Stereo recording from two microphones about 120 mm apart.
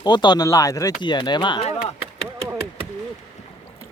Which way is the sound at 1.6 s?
60° left (ahead or behind).